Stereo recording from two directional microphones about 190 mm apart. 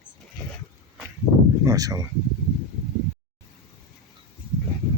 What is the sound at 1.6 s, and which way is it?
Speech, 20° right (ahead or behind).